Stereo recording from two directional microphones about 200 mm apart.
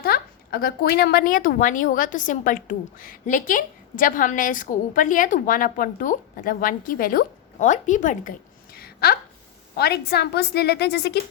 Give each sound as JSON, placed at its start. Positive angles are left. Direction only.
{"t": 0.0, "sound": "a woman's voice", "side_deg": 50}
{"t": 8.7, "sound": "a sound", "side_deg": 50}
{"t": 9.7, "sound": "a woman's voice", "side_deg": 50}